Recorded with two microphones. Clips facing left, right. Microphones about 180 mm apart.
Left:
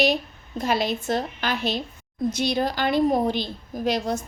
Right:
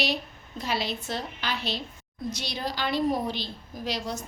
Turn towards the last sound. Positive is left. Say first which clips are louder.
# left 8 dB
turn(degrees=50)  # may be behind; listen again after turning